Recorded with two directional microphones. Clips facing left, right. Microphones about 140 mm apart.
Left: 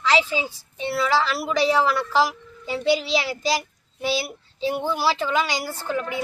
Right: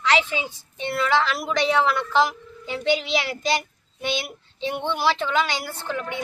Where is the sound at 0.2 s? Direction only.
35° left (ahead or behind).